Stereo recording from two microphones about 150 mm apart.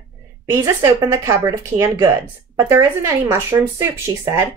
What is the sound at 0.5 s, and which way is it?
Speech, 15° right (ahead or behind).